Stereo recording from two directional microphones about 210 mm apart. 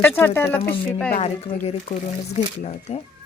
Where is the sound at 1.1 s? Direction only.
30° left (ahead or behind).